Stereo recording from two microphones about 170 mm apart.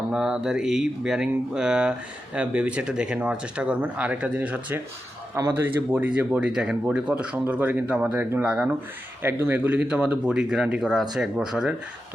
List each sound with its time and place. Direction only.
0.1 s speech: 5° right (ahead or behind)